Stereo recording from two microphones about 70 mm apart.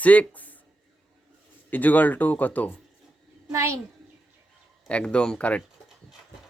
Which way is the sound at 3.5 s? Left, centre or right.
Right.